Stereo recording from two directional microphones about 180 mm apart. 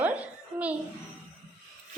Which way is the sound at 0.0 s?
10° right (ahead or behind).